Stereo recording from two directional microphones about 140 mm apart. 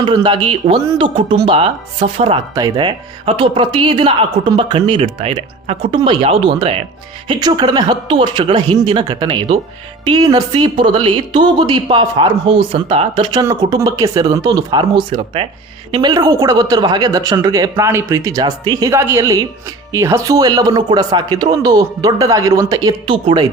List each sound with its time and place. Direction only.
0.0 s a woman's voice: 35° right (ahead or behind)
13.4 s speech: 25° right (ahead or behind)